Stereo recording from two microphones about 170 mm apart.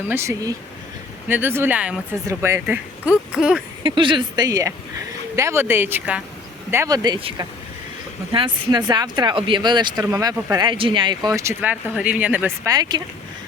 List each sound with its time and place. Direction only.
0.1 s speech: 15° right (ahead or behind)
3.8 s speech: 30° right (ahead or behind); by 12.5 s 10° right (ahead or behind)
12.6 s speech: 25° right (ahead or behind)